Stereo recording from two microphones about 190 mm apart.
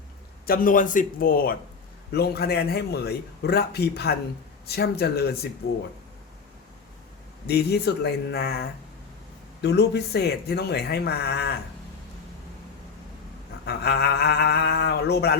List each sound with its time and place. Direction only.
0.4 s a man's voice: 50° left (ahead or behind)
7.4 s a man's voice: 60° left (ahead or behind)
13.7 s a man's voice: 55° left (ahead or behind)